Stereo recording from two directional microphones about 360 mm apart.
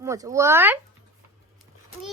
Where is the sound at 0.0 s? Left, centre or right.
Centre.